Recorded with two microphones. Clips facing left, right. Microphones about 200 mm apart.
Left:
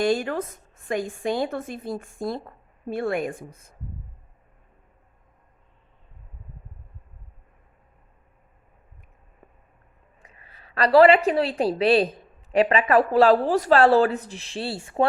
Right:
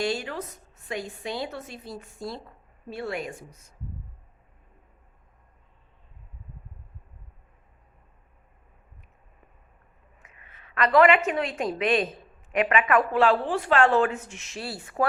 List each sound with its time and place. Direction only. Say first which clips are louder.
0.0 s a woman's voice: left 6 dB; 50° left (ahead or behind)
10.2 s a woman's voice: left 3 dB; 35° left (ahead or behind)